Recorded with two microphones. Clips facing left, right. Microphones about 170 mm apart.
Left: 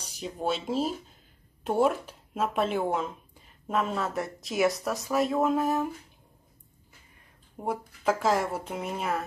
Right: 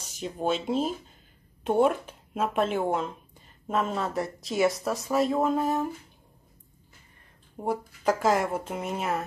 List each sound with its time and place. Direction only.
0.2 s speech: centre (ahead or behind)
7.5 s speech: 5° left (ahead or behind)